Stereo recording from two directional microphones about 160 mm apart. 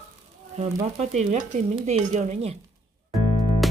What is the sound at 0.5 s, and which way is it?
Stir, 45° right (ahead or behind).